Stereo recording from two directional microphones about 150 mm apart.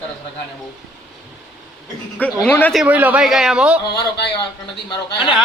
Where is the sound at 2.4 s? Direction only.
10° left (ahead or behind).